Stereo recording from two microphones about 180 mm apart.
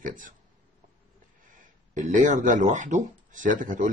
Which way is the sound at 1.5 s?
45° right (ahead or behind).